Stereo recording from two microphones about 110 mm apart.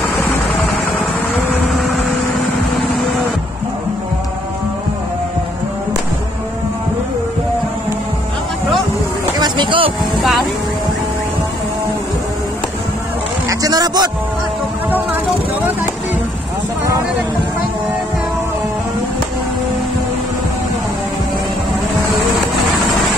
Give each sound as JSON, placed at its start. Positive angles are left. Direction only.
{"t": 0.2, "sound": "vehicle", "side_deg": 15}
{"t": 9.4, "sound": "vehicle", "side_deg": -45}
{"t": 13.5, "sound": "vehicle", "side_deg": -35}